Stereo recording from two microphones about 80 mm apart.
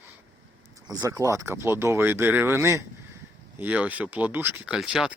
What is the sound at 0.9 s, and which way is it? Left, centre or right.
Speech, right.